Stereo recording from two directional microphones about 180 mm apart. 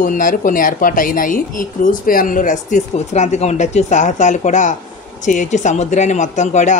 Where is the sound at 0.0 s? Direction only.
50° left (ahead or behind).